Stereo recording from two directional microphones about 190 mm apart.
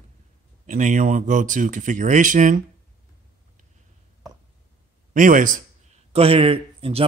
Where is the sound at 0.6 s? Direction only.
40° right (ahead or behind).